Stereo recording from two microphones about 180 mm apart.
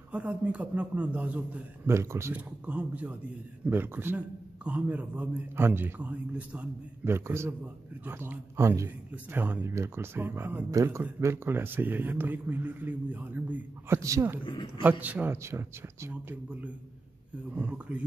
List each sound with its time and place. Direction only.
0.1 s speech: 5° right (ahead or behind)
14.4 s a man's voice: 25° left (ahead or behind)
14.8 s speech: 10° right (ahead or behind)